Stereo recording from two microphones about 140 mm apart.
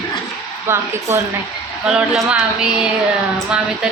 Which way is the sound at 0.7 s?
15° right (ahead or behind).